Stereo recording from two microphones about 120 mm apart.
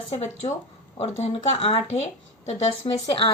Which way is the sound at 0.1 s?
70° left (ahead or behind).